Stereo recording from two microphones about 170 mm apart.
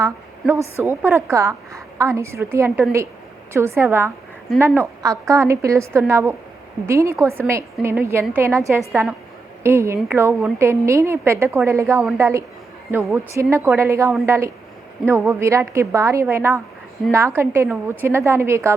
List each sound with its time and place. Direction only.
0.0 s a woman's voice: 15° right (ahead or behind)